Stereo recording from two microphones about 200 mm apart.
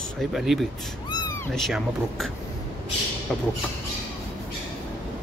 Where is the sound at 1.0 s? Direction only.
15° left (ahead or behind).